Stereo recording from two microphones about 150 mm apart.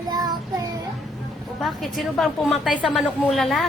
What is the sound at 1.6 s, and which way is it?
A woman's voice, centre (ahead or behind).